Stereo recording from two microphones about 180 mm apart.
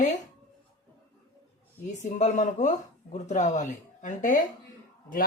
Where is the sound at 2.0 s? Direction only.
40° left (ahead or behind).